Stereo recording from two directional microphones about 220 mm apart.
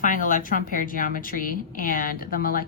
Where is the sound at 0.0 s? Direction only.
35° left (ahead or behind).